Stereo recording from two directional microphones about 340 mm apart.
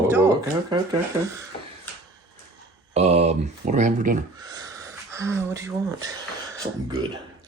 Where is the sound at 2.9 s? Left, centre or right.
Centre.